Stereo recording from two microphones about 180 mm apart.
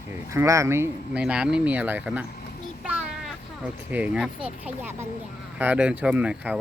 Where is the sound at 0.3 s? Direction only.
15° right (ahead or behind).